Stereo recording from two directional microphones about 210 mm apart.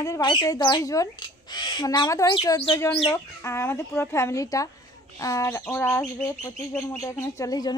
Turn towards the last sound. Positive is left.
turn(degrees=20)  # may be behind; listen again after turning